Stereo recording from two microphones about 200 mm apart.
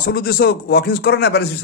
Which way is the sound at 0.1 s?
50° left (ahead or behind).